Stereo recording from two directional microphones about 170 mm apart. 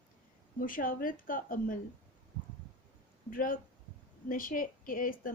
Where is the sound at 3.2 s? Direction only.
55° left (ahead or behind).